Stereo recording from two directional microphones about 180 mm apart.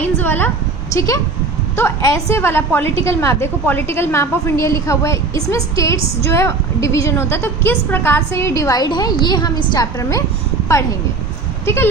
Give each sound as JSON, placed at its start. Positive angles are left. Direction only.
{"t": 0.0, "sound": "a sound", "side_deg": 10}
{"t": 0.9, "sound": "a woman's voice", "side_deg": 15}
{"t": 11.6, "sound": "speech", "side_deg": 15}